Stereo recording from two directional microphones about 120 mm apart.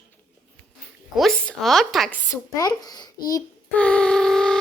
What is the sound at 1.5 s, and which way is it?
Speech, centre (ahead or behind).